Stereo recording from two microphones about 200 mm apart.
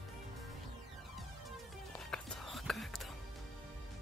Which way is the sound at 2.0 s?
5° left (ahead or behind).